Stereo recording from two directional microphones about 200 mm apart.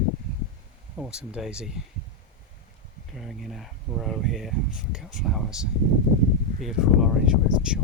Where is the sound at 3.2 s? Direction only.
Centre (ahead or behind).